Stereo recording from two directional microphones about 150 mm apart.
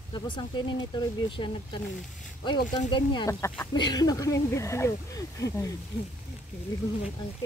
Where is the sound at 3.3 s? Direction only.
20° left (ahead or behind).